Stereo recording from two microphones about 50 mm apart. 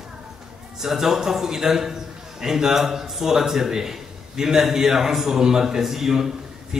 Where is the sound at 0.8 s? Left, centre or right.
Centre.